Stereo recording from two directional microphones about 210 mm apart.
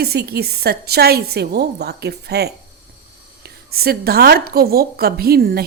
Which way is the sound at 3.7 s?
45° right (ahead or behind).